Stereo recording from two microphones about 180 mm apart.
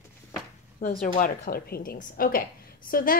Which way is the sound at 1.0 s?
50° left (ahead or behind).